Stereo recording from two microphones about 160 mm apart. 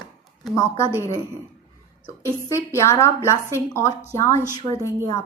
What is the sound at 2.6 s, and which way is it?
A woman's voice, 15° left (ahead or behind).